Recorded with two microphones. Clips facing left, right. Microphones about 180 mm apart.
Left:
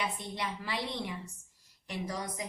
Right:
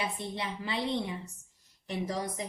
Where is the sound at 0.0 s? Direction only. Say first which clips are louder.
Right 1 dB; 25° right (ahead or behind).